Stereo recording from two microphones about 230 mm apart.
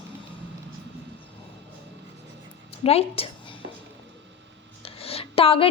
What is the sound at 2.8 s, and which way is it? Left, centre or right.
Speech, left.